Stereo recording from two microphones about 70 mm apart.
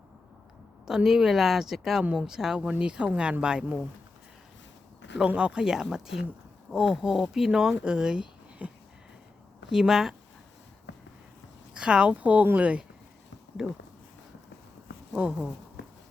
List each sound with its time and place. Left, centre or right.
0.9 s speech: centre
5.1 s speech: centre
11.7 s speech: centre
15.2 s speech: right